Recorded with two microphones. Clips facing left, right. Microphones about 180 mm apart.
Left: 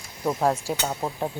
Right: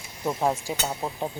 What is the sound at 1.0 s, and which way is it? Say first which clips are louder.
Speech: left 2 dB; 15° left (ahead or behind).